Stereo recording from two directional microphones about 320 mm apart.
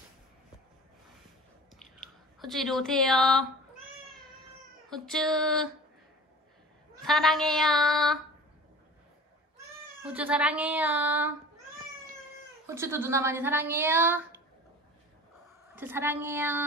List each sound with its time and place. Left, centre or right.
2.4 s child singing: centre
4.8 s child singing: centre
7.0 s child singing: centre
10.1 s child singing: centre
12.6 s a woman's voice: centre
15.7 s a woman's voice: centre